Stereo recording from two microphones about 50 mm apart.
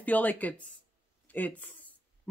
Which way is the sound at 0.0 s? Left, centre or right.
Left.